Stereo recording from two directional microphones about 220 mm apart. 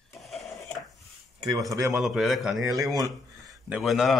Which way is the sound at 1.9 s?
Centre (ahead or behind).